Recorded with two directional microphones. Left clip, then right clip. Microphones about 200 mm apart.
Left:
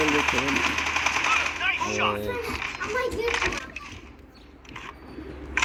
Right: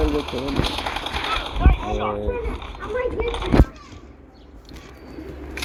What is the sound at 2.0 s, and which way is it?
A child's voice, 35° left (ahead or behind).